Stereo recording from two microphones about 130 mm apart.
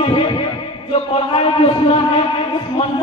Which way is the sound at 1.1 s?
45° left (ahead or behind).